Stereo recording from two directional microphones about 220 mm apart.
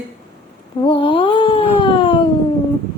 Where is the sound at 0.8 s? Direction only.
20° left (ahead or behind).